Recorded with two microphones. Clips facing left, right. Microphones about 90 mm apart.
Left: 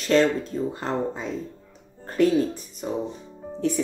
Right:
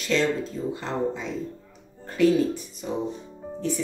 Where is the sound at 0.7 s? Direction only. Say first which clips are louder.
Even; 45° left (ahead or behind).